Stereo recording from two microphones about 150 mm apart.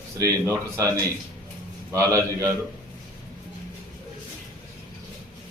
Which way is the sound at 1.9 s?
20° right (ahead or behind).